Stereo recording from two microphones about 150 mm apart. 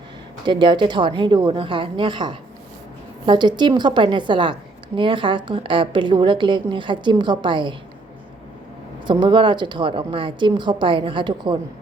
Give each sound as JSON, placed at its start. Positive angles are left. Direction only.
{"t": 0.4, "sound": "a woman's voice", "side_deg": -30}
{"t": 9.0, "sound": "a woman's voice", "side_deg": -30}